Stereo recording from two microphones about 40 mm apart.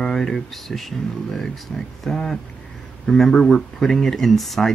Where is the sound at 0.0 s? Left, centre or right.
Centre.